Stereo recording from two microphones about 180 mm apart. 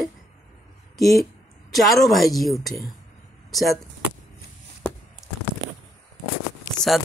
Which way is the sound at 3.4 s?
Centre (ahead or behind).